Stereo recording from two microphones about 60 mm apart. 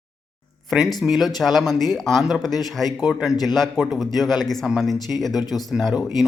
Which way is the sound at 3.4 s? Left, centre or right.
Centre.